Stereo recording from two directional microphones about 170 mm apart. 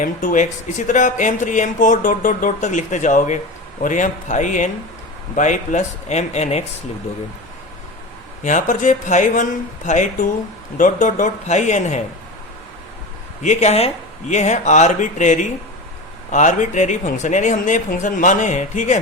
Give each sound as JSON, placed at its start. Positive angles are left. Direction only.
{"t": 0.0, "sound": "speech", "side_deg": 50}
{"t": 8.4, "sound": "speech", "side_deg": 45}
{"t": 13.4, "sound": "speech", "side_deg": 45}